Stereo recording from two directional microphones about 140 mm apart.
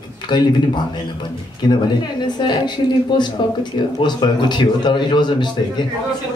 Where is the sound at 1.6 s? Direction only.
30° left (ahead or behind).